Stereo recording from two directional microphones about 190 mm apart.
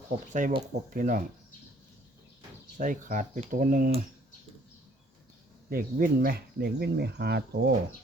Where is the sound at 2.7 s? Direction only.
45° right (ahead or behind).